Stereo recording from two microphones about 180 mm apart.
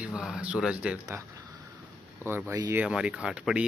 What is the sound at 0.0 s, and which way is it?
Speech, centre (ahead or behind).